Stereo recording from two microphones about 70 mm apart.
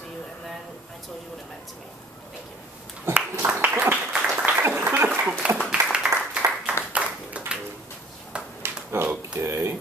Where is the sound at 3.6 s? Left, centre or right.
Right.